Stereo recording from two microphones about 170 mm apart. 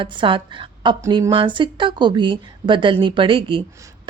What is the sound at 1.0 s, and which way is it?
Speech, 20° right (ahead or behind).